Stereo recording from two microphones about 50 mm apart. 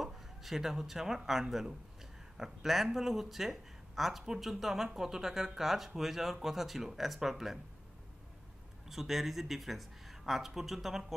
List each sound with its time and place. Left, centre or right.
0.0 s speech: centre
8.8 s speech: centre